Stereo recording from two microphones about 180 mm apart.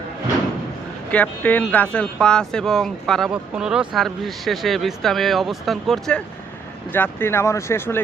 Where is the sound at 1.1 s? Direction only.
10° left (ahead or behind).